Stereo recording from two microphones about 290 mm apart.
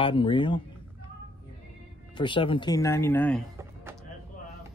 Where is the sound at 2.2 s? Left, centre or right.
Centre.